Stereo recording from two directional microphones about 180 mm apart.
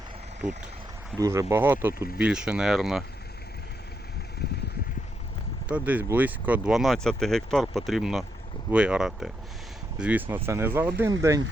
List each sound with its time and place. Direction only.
1.2 s speech: 15° right (ahead or behind); by 3.0 s centre (ahead or behind)
5.6 s speech: 10° right (ahead or behind)